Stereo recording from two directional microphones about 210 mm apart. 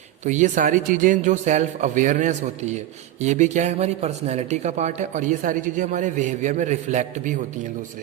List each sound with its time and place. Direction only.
0.3 s speech: 35° right (ahead or behind)